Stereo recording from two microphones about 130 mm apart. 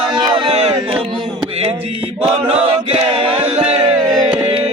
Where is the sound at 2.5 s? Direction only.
50° right (ahead or behind).